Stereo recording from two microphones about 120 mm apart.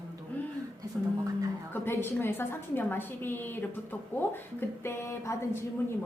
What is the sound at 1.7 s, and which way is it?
A woman's voice, 20° left (ahead or behind).